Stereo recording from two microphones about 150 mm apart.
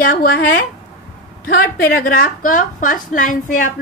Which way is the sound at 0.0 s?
80° left.